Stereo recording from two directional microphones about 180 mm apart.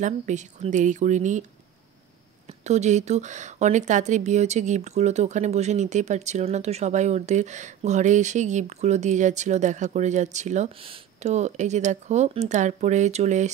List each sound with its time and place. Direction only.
0.0 s speech: 40° right (ahead or behind)
2.4 s speech: 40° right (ahead or behind)